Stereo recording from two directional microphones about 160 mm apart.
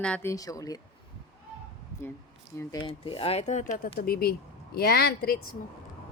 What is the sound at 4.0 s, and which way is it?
Speech, 70° left (ahead or behind).